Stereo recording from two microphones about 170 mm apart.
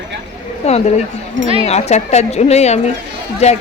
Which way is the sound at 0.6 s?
40° left (ahead or behind).